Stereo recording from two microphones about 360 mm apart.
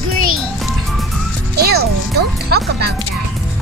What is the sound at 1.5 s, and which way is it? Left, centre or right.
Music, right.